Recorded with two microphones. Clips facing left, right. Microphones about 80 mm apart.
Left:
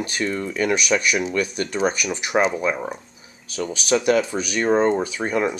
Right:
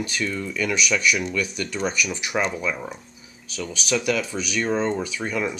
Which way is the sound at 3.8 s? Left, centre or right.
Left.